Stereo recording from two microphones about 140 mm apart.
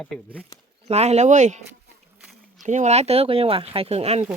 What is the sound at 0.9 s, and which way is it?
Speech, 50° right (ahead or behind).